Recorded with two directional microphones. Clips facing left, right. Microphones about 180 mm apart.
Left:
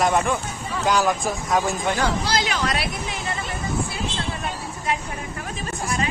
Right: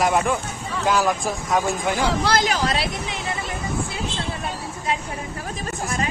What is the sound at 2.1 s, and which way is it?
Speech, 70° right (ahead or behind).